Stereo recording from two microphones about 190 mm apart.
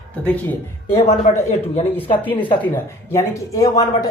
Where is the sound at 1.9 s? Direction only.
10° left (ahead or behind).